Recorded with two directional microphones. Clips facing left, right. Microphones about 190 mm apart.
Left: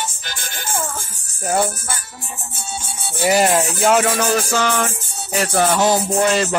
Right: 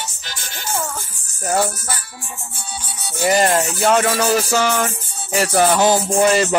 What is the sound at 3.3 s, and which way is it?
Music, 5° left (ahead or behind).